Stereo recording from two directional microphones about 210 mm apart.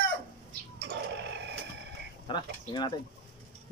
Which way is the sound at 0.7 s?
55° right (ahead or behind).